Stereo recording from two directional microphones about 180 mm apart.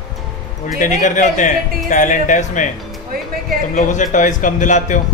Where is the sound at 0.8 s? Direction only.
45° left (ahead or behind).